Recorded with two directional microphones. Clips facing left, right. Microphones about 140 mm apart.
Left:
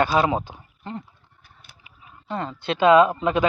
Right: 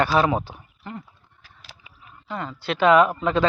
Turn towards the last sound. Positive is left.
turn(degrees=15)  # may be behind; listen again after turning